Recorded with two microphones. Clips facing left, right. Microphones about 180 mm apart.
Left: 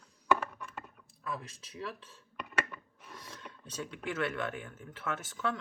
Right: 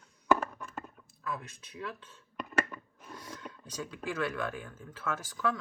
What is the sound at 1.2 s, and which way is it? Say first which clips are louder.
Speech: right 1 dB; 25° left (ahead or behind).